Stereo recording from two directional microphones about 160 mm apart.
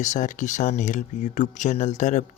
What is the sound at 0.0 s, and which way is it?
Speech, 50° left (ahead or behind).